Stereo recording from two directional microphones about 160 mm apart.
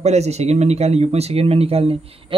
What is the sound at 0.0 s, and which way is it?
Speech, 45° right (ahead or behind).